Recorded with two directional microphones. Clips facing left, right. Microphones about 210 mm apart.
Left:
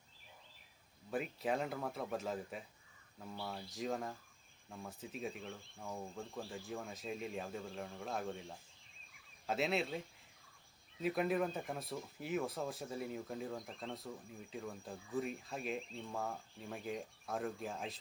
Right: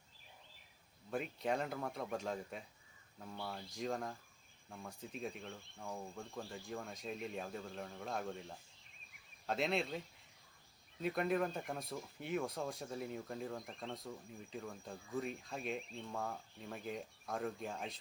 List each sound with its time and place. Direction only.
1.1 s speech: 5° left (ahead or behind)
11.0 s speech: 5° left (ahead or behind)